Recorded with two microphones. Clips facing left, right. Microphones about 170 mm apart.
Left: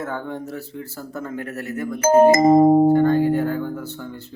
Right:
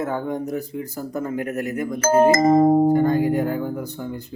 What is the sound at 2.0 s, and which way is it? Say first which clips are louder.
Speech: left 3 dB; 15° left (ahead or behind).